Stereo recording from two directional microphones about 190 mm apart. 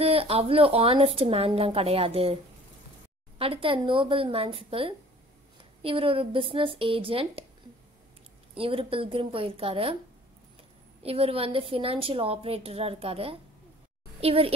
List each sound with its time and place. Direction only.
0.0 s a woman's voice: 30° right (ahead or behind)
3.3 s speech: 30° right (ahead or behind)
8.5 s speech: 30° right (ahead or behind)
11.0 s a woman's voice: 30° right (ahead or behind)